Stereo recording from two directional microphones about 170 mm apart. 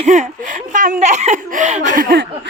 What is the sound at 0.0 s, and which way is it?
A woman's voice, 45° right (ahead or behind).